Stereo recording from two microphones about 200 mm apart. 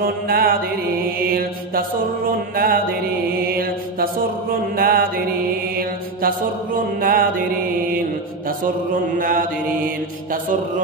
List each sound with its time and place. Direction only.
0.0 s mantra: 45° right (ahead or behind)
9.2 s mantra: 45° right (ahead or behind)